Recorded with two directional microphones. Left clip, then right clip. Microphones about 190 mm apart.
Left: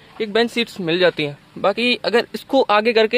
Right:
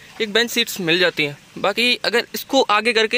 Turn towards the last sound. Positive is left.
turn(degrees=0)  # may be behind; listen again after turning